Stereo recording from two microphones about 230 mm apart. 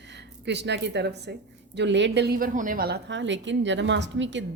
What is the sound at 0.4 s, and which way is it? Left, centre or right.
A woman's voice, right.